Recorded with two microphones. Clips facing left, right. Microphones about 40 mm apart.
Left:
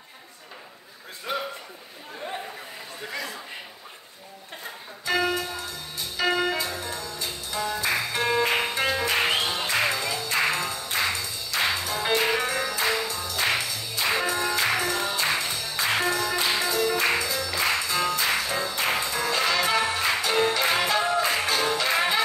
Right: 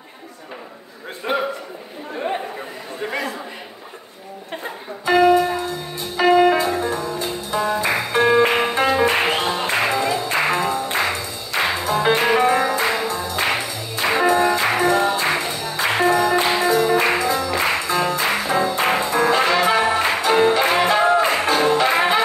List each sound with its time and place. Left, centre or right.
1.3 s a sound: right
2.1 s chatter: right
5.0 s music: right